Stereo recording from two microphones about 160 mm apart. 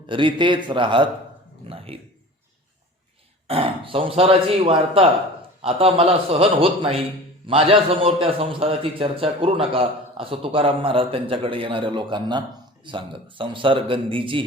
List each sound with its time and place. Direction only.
0.1 s a man's voice: 30° right (ahead or behind)
3.4 s a man's voice: 35° right (ahead or behind)